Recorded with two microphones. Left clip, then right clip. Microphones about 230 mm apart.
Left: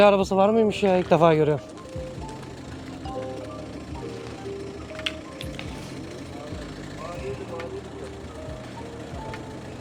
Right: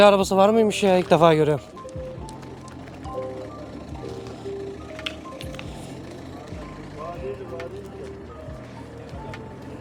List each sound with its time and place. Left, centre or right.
0.0 s speech: centre